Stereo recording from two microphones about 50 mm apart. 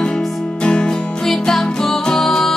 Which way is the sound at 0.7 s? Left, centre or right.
Centre.